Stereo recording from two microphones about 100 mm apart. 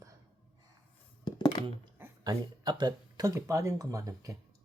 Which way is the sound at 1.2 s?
45° left (ahead or behind).